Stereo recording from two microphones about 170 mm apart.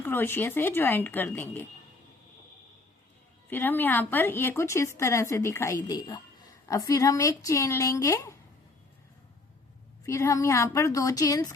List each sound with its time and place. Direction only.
0.0 s a woman's voice: 10° left (ahead or behind)
3.5 s a woman's voice: 10° left (ahead or behind)
10.1 s speech: 20° left (ahead or behind)